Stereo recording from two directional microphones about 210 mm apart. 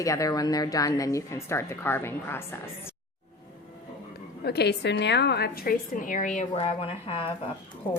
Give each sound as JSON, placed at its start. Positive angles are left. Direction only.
{"t": 0.0, "sound": "speech", "side_deg": 15}
{"t": 4.4, "sound": "a woman's voice", "side_deg": 50}